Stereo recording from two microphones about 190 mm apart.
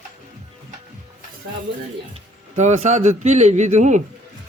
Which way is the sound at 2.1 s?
35° right (ahead or behind).